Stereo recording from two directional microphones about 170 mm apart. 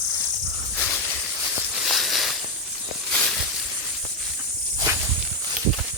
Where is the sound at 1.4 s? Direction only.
Centre (ahead or behind).